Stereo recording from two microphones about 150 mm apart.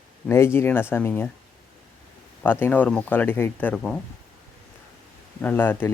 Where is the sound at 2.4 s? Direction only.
10° left (ahead or behind).